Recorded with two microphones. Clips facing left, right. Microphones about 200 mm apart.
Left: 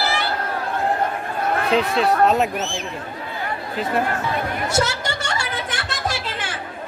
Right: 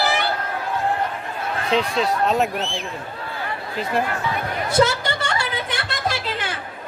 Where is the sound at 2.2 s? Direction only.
Centre (ahead or behind).